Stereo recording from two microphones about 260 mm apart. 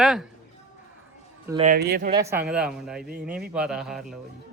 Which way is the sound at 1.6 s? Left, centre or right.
Right.